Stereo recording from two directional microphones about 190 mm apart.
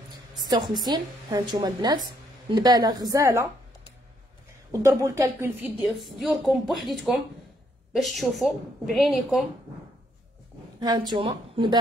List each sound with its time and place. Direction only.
0.4 s a woman's voice: 20° right (ahead or behind)
4.7 s a woman's voice: 15° right (ahead or behind)
10.8 s a woman's voice: 20° right (ahead or behind)